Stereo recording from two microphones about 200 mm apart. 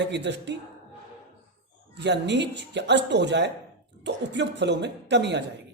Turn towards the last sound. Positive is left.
turn(degrees=-60)  # may be behind; listen again after turning